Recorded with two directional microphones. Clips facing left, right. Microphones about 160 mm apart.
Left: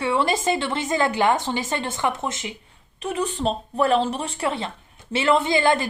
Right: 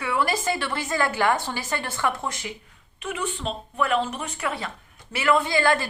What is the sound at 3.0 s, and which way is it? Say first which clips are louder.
A woman's voice: left 5 dB; 35° left (ahead or behind).